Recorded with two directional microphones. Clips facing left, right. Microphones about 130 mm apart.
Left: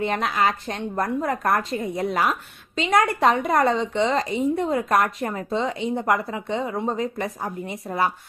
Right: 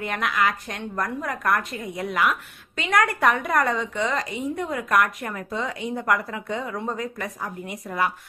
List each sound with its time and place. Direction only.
0.0 s a woman's voice: 30° left (ahead or behind)
2.8 s speech: 25° left (ahead or behind)